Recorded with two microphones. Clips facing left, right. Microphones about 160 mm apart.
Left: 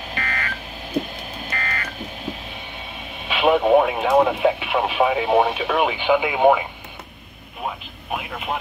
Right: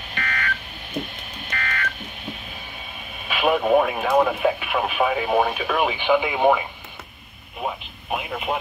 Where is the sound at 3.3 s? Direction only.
25° left (ahead or behind).